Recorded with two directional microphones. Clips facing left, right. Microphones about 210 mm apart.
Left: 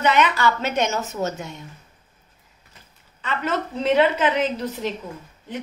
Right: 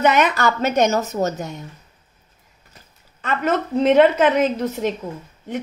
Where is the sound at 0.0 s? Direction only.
45° right (ahead or behind).